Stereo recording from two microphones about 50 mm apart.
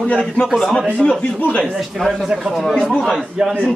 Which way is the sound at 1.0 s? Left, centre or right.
Left.